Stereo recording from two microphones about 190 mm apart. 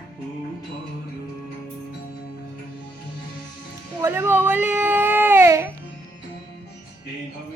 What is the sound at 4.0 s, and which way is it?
Baby cry, 10° right (ahead or behind).